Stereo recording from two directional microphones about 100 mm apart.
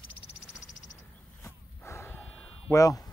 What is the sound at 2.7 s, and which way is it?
Speech, 35° left (ahead or behind).